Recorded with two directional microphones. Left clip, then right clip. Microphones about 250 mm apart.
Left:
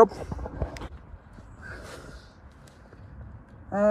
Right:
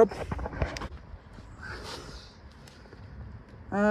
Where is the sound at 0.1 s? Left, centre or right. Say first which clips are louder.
Right 2 dB; left.